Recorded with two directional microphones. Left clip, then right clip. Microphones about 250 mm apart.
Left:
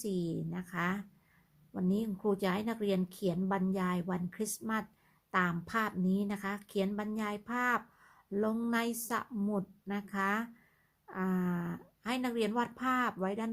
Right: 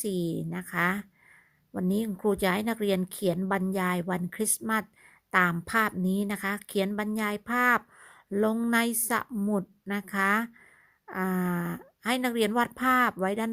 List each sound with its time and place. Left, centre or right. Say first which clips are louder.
0.0 s a woman's voice: right 6 dB; right